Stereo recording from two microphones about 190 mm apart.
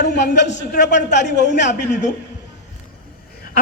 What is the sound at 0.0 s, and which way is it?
Speech, 65° left (ahead or behind).